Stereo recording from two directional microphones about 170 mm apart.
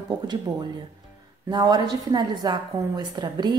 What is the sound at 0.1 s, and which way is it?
A woman's voice, 25° right (ahead or behind).